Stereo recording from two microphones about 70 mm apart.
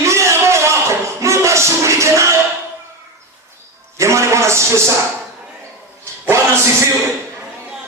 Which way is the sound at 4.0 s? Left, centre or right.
Right.